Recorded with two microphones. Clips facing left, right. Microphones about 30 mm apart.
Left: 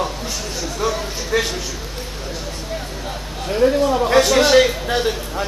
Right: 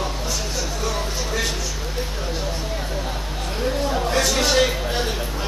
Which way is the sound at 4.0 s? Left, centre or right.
Left.